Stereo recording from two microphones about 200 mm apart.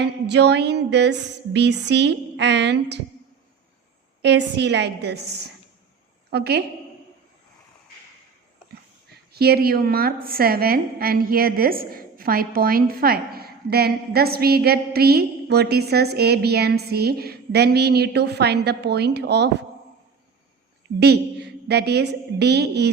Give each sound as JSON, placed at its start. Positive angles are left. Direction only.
{"t": 0.0, "sound": "music", "side_deg": -60}
{"t": 4.2, "sound": "music", "side_deg": -60}
{"t": 6.3, "sound": "a woman's voice", "side_deg": -55}
{"t": 9.3, "sound": "a woman's voice", "side_deg": -50}
{"t": 21.0, "sound": "a woman's voice", "side_deg": -55}